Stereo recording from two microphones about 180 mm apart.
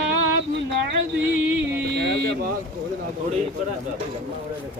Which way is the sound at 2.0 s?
70° right (ahead or behind).